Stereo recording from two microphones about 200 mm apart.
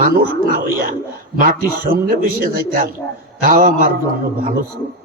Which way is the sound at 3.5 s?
45° right (ahead or behind).